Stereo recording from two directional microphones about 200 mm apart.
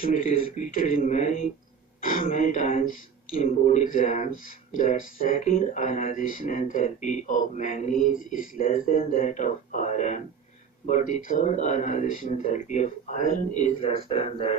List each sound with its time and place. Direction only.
0.0 s speech: 45° left (ahead or behind)